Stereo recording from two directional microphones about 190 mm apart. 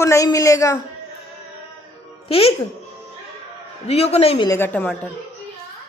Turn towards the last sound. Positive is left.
turn(degrees=10)  # may be behind; listen again after turning